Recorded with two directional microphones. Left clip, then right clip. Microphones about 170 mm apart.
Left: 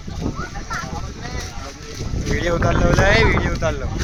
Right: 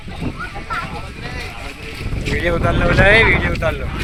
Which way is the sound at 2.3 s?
5° left (ahead or behind).